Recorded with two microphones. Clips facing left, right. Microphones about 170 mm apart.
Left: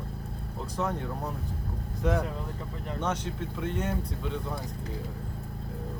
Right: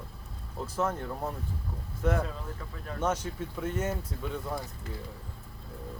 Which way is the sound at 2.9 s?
5° right (ahead or behind).